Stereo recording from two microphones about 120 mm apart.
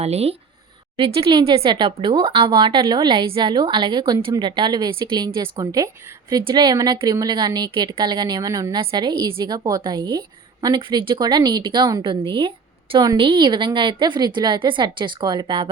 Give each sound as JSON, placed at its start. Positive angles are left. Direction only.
{"t": 0.0, "sound": "speech", "side_deg": -60}
{"t": 0.9, "sound": "speech", "side_deg": -45}
{"t": 2.2, "sound": "a woman's voice", "side_deg": -50}
{"t": 8.8, "sound": "a woman's voice", "side_deg": -40}
{"t": 12.2, "sound": "a woman's voice", "side_deg": -45}